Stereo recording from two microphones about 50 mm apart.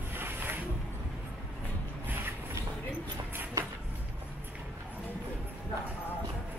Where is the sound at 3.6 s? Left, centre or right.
Right.